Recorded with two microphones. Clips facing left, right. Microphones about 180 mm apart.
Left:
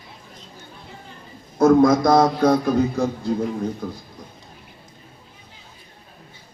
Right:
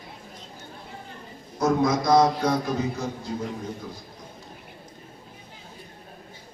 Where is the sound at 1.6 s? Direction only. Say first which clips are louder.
Left 8 dB; 50° left (ahead or behind).